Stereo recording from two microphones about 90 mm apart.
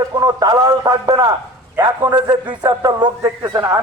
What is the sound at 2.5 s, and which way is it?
Speech, 45° right (ahead or behind).